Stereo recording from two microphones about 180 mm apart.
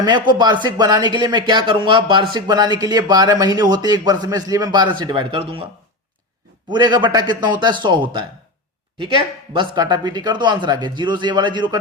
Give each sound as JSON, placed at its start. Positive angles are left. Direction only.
{"t": 0.0, "sound": "speech", "side_deg": -25}
{"t": 6.7, "sound": "speech", "side_deg": -25}